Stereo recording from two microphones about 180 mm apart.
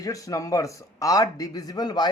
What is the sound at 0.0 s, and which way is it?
A man's voice, 20° left (ahead or behind).